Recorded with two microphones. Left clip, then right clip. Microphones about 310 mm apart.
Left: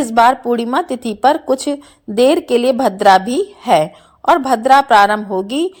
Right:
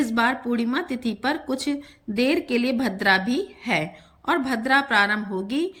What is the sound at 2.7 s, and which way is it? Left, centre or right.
Speech, left.